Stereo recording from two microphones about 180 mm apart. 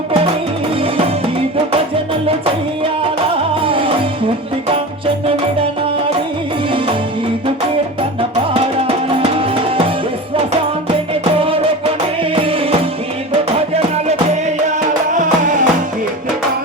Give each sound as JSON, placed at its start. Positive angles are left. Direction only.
{"t": 3.6, "sound": "music", "side_deg": -30}
{"t": 11.1, "sound": "music", "side_deg": -30}
{"t": 15.1, "sound": "music", "side_deg": -45}